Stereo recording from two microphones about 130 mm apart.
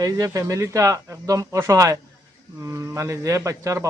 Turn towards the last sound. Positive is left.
turn(degrees=-25)  # may be behind; listen again after turning